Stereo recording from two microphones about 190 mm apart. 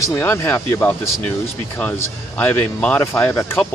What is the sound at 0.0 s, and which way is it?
A man's voice, 15° left (ahead or behind).